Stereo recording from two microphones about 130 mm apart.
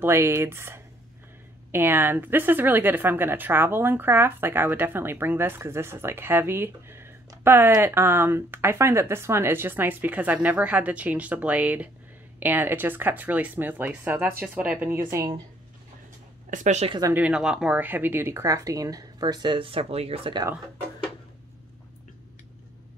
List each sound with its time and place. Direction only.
0.0 s speech: 20° right (ahead or behind)
16.4 s speech: 70° right (ahead or behind)
17.1 s speech: 10° right (ahead or behind); by 20.4 s 45° right (ahead or behind)